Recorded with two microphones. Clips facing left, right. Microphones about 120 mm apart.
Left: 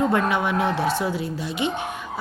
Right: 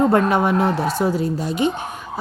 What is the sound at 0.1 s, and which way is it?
A woman's voice, 40° right (ahead or behind).